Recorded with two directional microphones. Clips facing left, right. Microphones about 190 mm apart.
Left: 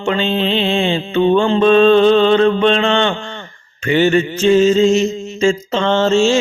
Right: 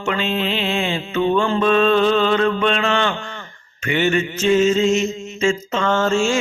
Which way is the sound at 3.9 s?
35° left (ahead or behind).